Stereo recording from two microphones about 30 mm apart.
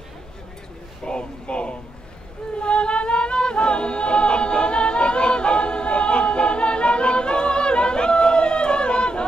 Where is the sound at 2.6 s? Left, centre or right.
Left.